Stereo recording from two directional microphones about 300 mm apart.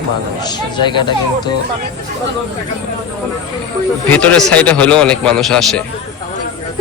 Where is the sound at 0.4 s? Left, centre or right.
Centre.